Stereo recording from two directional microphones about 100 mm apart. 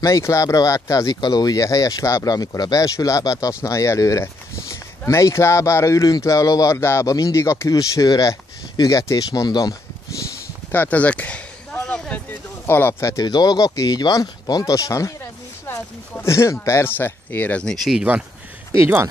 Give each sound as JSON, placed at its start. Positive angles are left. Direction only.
{"t": 0.0, "sound": "speech", "side_deg": 30}
{"t": 10.7, "sound": "a sound", "side_deg": 15}
{"t": 12.3, "sound": "speech", "side_deg": 20}
{"t": 13.2, "sound": "speech", "side_deg": 45}
{"t": 17.7, "sound": "speech", "side_deg": -5}